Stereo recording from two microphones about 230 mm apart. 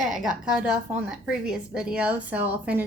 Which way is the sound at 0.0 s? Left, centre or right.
Centre.